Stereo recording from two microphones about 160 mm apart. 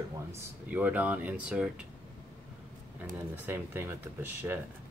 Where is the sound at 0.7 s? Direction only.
10° right (ahead or behind).